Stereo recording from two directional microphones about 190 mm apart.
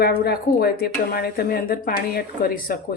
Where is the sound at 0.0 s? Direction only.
55° left (ahead or behind).